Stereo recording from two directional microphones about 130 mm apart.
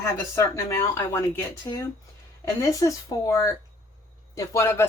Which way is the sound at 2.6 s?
25° left (ahead or behind).